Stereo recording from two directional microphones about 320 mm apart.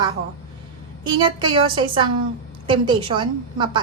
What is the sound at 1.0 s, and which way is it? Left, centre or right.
A woman's voice, centre.